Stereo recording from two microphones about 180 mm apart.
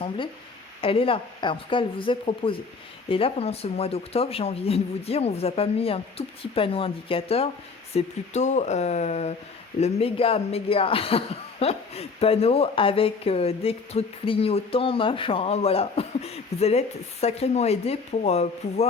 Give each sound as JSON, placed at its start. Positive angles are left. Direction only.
{"t": 0.8, "sound": "speech", "side_deg": 30}